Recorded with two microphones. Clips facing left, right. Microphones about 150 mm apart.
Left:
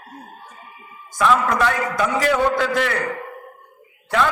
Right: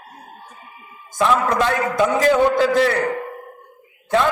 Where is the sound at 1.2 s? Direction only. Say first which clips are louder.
Even; 25° right (ahead or behind).